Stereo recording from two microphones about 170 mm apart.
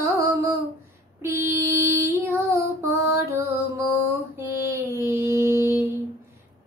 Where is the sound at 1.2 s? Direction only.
15° right (ahead or behind).